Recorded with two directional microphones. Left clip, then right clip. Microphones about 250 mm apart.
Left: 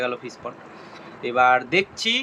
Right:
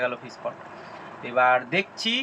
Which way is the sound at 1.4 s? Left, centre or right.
Centre.